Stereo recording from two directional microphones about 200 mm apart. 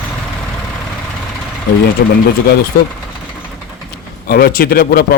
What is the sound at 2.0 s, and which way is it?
Speech, 55° left (ahead or behind).